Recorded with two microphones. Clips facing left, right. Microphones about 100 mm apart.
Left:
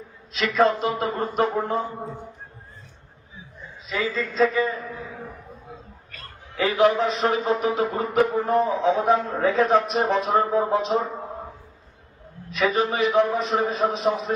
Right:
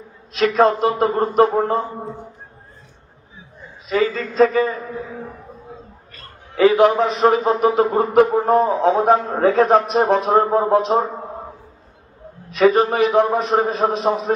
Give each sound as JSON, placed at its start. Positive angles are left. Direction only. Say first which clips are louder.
{"t": 0.3, "sound": "a man's voice", "louder": "right 5 dB", "side_deg": -45}
{"t": 3.8, "sound": "a man's voice", "louder": "right 7 dB", "side_deg": -50}
{"t": 6.6, "sound": "a man's voice", "louder": "right 6 dB", "side_deg": -50}
{"t": 12.5, "sound": "a man's voice", "louder": "right 8 dB", "side_deg": -50}